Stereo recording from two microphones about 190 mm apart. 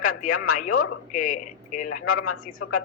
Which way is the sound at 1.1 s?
45° left (ahead or behind).